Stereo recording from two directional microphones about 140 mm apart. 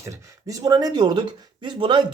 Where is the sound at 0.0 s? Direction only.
25° right (ahead or behind).